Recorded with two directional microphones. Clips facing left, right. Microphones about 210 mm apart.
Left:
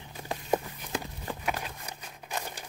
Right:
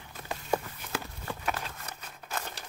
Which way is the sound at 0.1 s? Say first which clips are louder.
Left 2 dB; 15° left (ahead or behind).